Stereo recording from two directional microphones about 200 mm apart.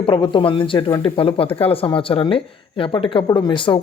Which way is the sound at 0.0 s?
25° left (ahead or behind).